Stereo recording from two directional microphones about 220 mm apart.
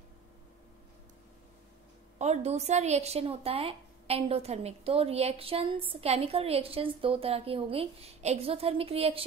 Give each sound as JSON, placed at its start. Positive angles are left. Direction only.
{"t": 2.1, "sound": "a woman's voice", "side_deg": -30}